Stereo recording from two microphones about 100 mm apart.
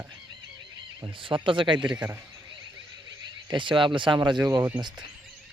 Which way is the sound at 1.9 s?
15° right (ahead or behind).